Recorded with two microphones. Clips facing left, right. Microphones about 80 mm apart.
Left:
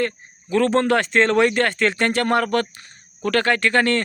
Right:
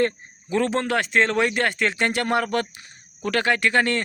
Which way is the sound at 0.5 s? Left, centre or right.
Centre.